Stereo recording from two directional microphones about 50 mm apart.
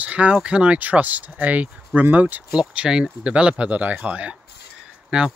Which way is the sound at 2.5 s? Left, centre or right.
Centre.